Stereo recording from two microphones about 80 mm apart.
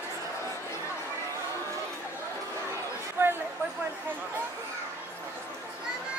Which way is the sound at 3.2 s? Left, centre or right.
Right.